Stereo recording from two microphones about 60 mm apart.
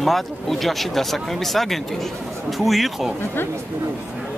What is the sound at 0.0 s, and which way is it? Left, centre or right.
Speech, centre.